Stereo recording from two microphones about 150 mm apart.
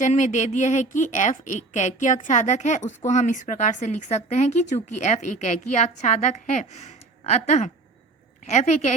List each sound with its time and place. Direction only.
0.0 s a woman's voice: 55° left (ahead or behind)